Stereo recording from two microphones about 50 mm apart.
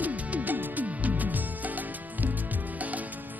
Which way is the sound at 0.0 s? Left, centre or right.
Right.